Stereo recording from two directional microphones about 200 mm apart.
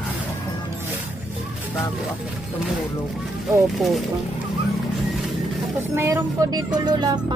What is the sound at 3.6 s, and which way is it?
Speech, centre (ahead or behind).